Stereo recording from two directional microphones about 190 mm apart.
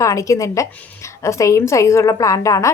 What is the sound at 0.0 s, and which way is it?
A woman's voice, 15° left (ahead or behind).